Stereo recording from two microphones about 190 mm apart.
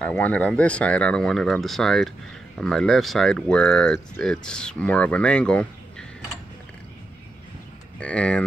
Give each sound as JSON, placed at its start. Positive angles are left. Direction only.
{"t": 0.0, "sound": "speech", "side_deg": 10}
{"t": 8.0, "sound": "speech", "side_deg": 5}